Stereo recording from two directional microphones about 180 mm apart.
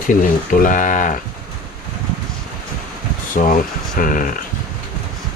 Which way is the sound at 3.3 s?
50° left (ahead or behind).